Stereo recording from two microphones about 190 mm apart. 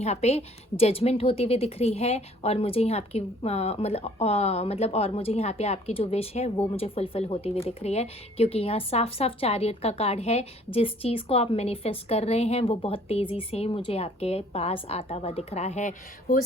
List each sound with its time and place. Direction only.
0.0 s a woman's voice: 35° left (ahead or behind)